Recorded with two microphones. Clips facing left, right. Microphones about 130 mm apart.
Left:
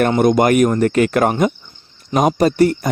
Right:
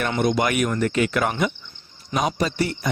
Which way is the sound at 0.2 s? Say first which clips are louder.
Left 7 dB; 50° left (ahead or behind).